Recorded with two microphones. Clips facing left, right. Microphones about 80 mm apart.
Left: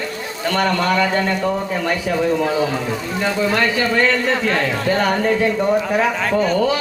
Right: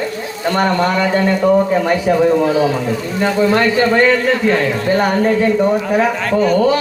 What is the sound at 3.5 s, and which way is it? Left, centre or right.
A man's voice, right.